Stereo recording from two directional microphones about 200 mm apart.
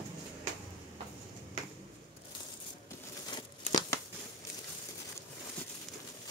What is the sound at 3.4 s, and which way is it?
Tearing, 20° left (ahead or behind).